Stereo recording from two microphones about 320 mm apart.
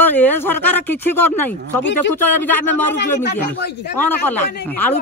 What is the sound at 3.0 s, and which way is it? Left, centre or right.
Speech, left.